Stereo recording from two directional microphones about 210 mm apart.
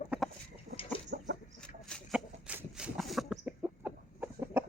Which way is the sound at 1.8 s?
Centre (ahead or behind).